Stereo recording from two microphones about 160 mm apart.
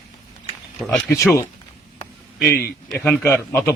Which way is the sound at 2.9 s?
5° left (ahead or behind).